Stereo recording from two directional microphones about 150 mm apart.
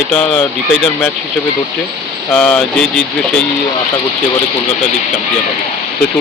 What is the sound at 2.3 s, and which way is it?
Speech, 10° left (ahead or behind).